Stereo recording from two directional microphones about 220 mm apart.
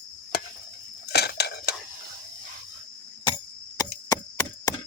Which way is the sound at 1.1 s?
45° left (ahead or behind).